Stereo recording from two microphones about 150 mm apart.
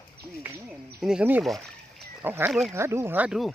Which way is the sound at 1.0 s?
5° right (ahead or behind).